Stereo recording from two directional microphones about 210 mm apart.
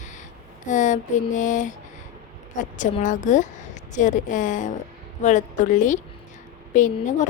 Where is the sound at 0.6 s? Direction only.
35° left (ahead or behind).